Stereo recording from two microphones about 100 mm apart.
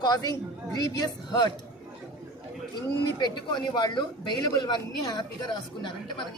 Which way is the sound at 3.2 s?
45° left (ahead or behind).